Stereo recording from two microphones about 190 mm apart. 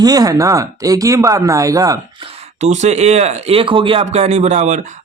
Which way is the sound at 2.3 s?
35° right (ahead or behind).